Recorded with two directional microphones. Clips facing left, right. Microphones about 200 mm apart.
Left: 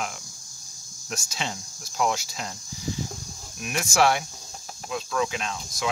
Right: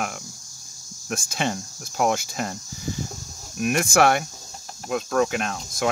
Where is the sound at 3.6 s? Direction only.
55° right (ahead or behind).